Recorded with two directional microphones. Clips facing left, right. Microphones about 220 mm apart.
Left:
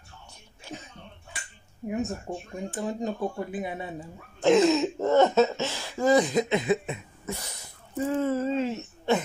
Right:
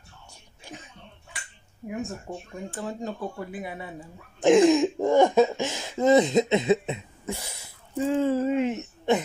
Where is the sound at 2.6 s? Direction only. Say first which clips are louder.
Left 3 dB; 15° left (ahead or behind).